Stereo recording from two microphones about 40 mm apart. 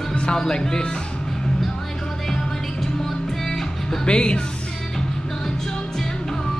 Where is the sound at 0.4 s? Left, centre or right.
Centre.